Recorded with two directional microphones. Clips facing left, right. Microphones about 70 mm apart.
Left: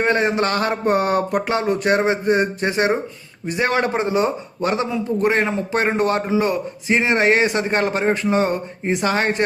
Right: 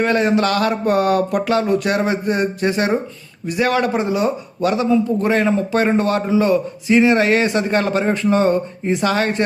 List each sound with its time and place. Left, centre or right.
0.0 s a man's voice: left